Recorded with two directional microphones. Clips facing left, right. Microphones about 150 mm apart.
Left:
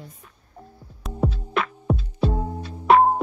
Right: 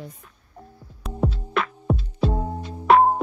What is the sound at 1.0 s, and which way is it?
Music, centre (ahead or behind).